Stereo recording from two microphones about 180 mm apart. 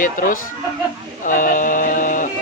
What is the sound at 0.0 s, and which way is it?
Speech, 45° left (ahead or behind).